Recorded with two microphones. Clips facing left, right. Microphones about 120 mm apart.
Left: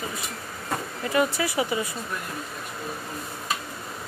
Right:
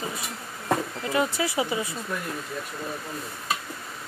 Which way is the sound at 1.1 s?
20° right (ahead or behind).